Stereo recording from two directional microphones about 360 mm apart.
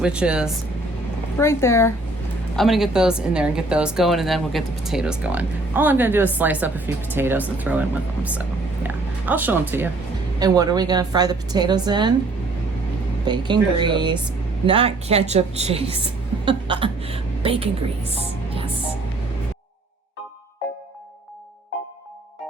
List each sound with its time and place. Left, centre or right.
0.0 s a woman's voice: centre
13.2 s speech: centre